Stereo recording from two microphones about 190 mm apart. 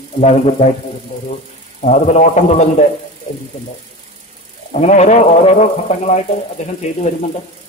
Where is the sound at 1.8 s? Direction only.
40° left (ahead or behind).